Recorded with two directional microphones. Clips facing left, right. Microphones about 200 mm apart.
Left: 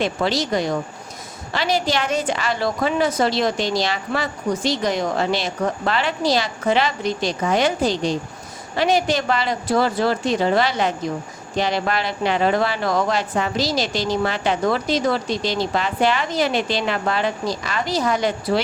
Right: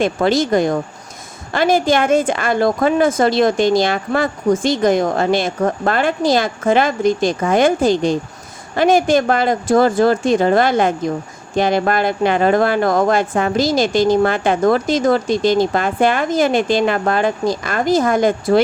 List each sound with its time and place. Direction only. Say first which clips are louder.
0.0 s speech: right 6 dB; 50° right (ahead or behind)